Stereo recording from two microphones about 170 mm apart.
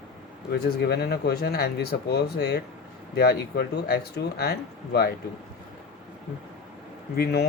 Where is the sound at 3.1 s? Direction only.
65° left (ahead or behind).